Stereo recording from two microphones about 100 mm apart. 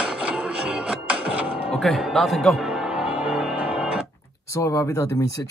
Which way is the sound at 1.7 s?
Centre (ahead or behind).